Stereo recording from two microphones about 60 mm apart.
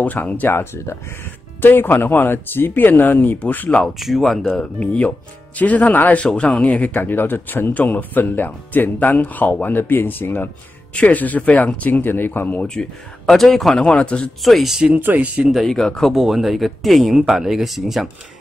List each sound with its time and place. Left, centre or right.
0.0 s speech: left
1.6 s speech: left
4.0 s speech: centre
4.7 s speech: left
7.0 s speech: left
13.3 s speech: centre
14.4 s speech: centre
14.9 s speech: right
15.1 s speech: right
15.6 s speech: centre
16.1 s speech: centre